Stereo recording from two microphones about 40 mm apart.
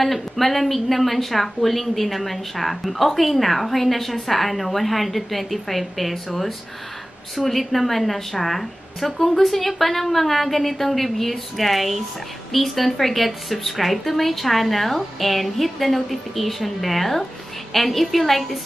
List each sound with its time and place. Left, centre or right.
0.0 s a woman's voice: centre